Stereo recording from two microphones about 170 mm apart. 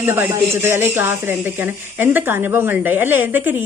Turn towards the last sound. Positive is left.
turn(degrees=-10)  # may be behind; listen again after turning